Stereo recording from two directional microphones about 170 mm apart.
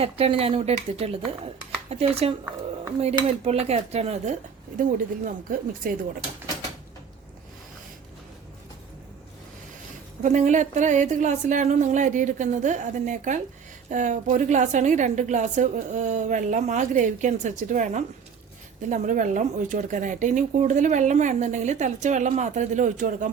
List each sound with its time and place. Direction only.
0.0 s speech: 35° right (ahead or behind)
3.4 s speech: 35° right (ahead or behind)
4.8 s a woman's voice: 50° right (ahead or behind)
10.2 s a woman's voice: 45° right (ahead or behind)